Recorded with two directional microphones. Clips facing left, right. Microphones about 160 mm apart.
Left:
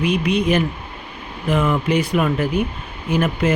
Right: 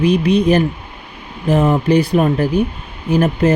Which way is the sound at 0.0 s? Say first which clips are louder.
Right 5 dB; 35° right (ahead or behind).